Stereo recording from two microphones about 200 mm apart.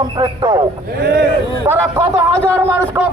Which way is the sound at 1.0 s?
55° right (ahead or behind).